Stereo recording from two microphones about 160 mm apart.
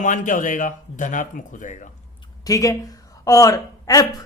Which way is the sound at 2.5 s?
20° left (ahead or behind).